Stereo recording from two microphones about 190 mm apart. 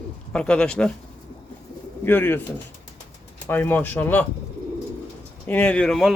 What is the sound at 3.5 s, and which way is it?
Speech, 10° left (ahead or behind).